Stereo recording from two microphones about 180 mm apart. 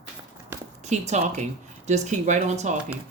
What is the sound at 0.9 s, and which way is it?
A woman's voice, 40° right (ahead or behind).